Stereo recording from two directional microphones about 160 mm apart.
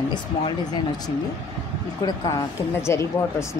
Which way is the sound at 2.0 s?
25° left (ahead or behind).